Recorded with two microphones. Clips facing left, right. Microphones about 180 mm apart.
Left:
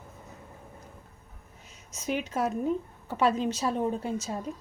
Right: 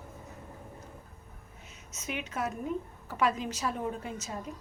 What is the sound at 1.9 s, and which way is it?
A woman's voice, 35° left (ahead or behind).